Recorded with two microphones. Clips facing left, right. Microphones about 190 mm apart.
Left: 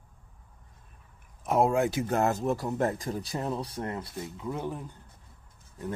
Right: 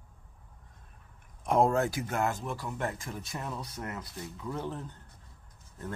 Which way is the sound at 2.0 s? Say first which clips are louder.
Left 5 dB; 40° left (ahead or behind).